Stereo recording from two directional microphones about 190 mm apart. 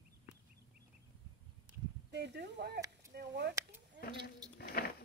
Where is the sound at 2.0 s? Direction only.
65° right (ahead or behind).